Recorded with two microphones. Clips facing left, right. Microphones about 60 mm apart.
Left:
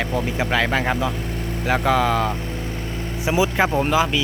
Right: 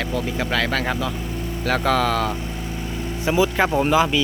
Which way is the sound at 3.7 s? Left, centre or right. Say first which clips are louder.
Right 1 dB; centre.